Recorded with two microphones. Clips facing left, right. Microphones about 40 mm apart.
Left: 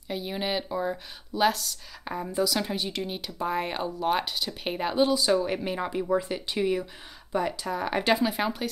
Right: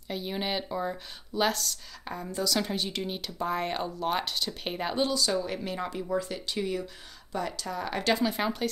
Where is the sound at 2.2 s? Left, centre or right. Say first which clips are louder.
Left 3 dB; centre.